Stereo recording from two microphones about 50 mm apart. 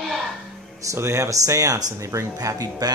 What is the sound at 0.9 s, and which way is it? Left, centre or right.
Speech, right.